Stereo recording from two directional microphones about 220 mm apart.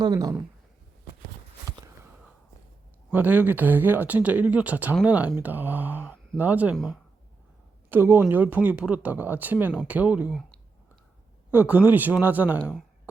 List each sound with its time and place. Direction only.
0.0 s speech: 15° right (ahead or behind)
3.1 s speech: 10° right (ahead or behind)
11.5 s speech: 5° right (ahead or behind)